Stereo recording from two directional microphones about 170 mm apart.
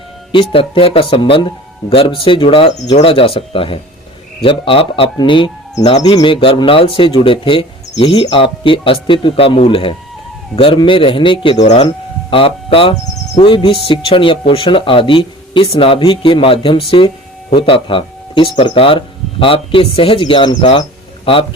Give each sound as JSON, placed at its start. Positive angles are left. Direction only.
{"t": 0.3, "sound": "speech", "side_deg": 30}